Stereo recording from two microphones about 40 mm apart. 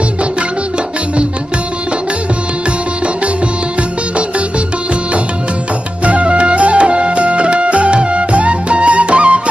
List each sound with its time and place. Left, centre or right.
3.8 s music: right
6.0 s music: right